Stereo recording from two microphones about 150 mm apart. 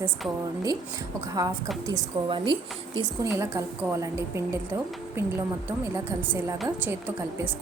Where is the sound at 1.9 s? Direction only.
35° right (ahead or behind).